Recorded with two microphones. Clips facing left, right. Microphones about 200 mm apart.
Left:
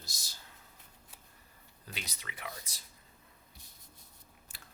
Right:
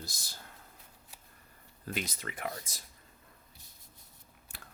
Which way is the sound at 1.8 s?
50° right (ahead or behind).